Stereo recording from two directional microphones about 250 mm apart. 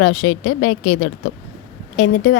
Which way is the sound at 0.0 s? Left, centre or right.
Left.